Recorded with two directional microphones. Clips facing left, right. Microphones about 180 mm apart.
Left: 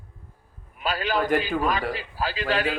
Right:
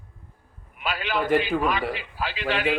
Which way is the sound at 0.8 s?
40° left (ahead or behind).